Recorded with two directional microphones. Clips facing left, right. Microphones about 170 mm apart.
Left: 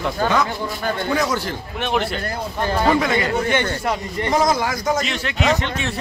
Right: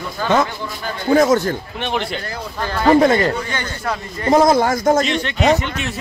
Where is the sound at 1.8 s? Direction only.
Centre (ahead or behind).